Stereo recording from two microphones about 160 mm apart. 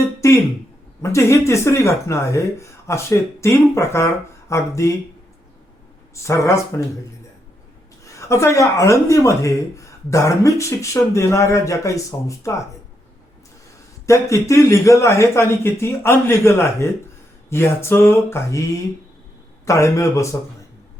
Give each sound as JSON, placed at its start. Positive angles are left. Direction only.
{"t": 0.0, "sound": "a sound", "side_deg": 20}
{"t": 1.0, "sound": "speech", "side_deg": 20}
{"t": 6.1, "sound": "speech", "side_deg": 20}
{"t": 8.0, "sound": "speech", "side_deg": 20}
{"t": 14.1, "sound": "speech", "side_deg": 20}